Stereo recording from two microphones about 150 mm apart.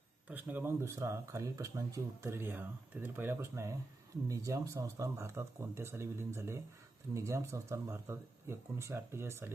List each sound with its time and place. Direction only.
0.3 s speech: 10° right (ahead or behind)